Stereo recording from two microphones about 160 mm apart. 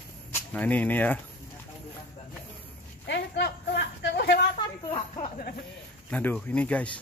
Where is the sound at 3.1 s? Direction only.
90° left.